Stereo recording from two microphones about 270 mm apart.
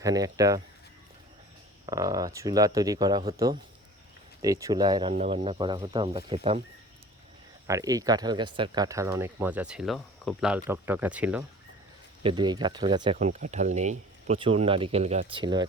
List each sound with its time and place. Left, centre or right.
0.0 s speech: centre
1.9 s speech: centre
7.7 s speech: centre
12.2 s speech: centre